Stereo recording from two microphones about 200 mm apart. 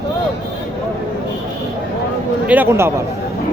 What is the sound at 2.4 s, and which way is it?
Speech, 10° right (ahead or behind).